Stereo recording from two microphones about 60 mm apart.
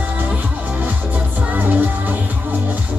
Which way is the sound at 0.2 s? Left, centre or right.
Right.